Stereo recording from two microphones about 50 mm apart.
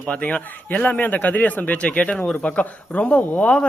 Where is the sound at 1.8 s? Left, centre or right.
Left.